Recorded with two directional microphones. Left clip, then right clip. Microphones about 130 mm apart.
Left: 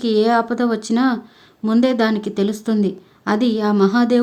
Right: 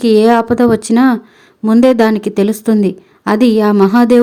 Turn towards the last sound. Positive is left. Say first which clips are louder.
# right 7 dB
turn(degrees=-40)  # may be behind; listen again after turning